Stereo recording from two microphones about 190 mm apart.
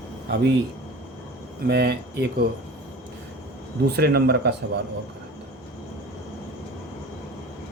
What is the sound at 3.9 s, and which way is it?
Speech, 55° right (ahead or behind).